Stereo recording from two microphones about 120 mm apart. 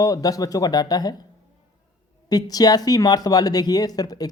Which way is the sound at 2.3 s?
30° left (ahead or behind).